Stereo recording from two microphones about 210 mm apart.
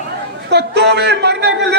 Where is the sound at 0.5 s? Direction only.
55° right (ahead or behind).